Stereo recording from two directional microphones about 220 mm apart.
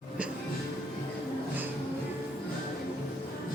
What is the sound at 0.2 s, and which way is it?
Music, 5° right (ahead or behind).